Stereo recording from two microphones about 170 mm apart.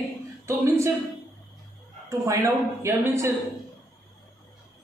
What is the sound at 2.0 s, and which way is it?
Speech, 20° right (ahead or behind).